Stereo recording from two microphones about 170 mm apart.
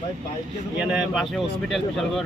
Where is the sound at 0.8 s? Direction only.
5° right (ahead or behind).